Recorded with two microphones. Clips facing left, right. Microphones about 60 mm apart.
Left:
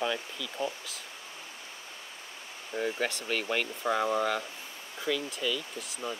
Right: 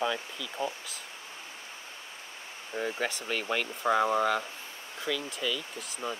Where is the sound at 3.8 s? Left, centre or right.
Centre.